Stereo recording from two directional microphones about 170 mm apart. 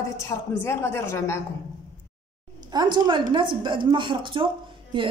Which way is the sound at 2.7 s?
25° right (ahead or behind).